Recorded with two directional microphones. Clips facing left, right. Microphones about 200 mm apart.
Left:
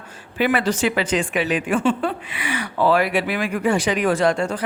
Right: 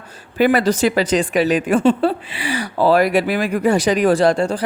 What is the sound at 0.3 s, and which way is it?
A woman's voice, 40° right (ahead or behind).